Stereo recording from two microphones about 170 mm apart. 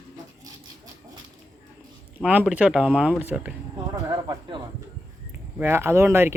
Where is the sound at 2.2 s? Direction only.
5° right (ahead or behind).